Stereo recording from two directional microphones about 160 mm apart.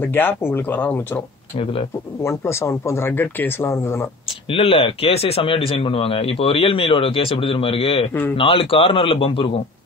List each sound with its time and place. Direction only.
0.0 s speech: 10° left (ahead or behind)
1.6 s speech: 35° left (ahead or behind)
2.2 s speech: 15° left (ahead or behind)
4.3 s speech: 35° left (ahead or behind)